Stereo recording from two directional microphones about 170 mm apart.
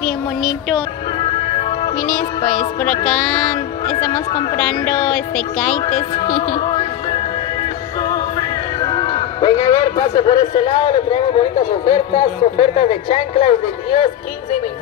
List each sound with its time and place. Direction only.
0.0 s a sound: centre (ahead or behind)
1.2 s music: 30° left (ahead or behind)
2.8 s music: 5° left (ahead or behind)
4.3 s speech: 30° left (ahead or behind)
5.8 s music: 35° left (ahead or behind)
9.0 s a man's voice: 25° left (ahead or behind)